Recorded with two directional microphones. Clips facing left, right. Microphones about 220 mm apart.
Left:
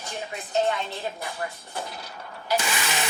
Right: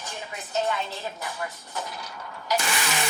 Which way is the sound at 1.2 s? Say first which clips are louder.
Left 1 dB; 30° left (ahead or behind).